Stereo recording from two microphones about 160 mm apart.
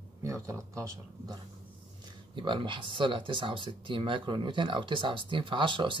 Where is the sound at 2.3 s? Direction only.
30° right (ahead or behind).